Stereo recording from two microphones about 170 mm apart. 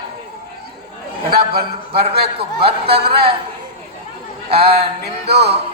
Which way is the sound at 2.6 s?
35° right (ahead or behind).